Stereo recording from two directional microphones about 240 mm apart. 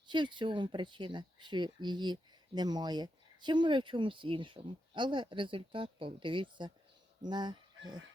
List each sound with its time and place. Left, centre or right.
0.1 s speech: centre